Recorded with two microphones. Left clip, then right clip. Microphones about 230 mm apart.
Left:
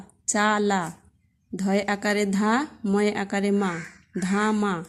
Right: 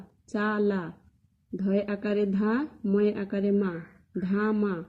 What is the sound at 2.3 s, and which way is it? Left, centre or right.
Speech, left.